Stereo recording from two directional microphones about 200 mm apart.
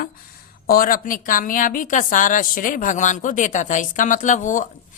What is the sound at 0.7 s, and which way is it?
A woman's voice, 45° left (ahead or behind).